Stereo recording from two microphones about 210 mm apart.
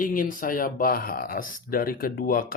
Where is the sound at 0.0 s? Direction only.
40° left (ahead or behind).